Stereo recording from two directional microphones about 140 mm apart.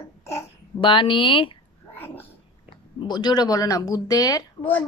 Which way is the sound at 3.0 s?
30° left (ahead or behind).